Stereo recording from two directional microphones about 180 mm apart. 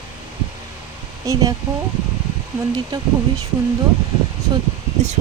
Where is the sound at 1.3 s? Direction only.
20° right (ahead or behind).